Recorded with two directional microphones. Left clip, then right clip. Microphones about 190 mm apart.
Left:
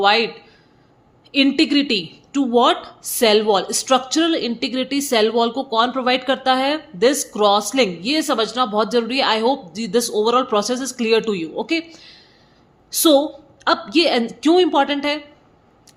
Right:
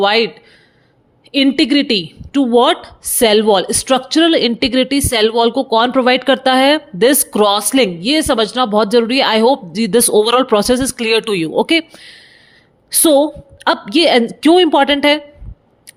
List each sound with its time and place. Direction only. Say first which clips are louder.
0.0 s a woman's voice: right 3 dB; 40° right (ahead or behind)
1.3 s a woman's voice: right 4 dB; 35° right (ahead or behind)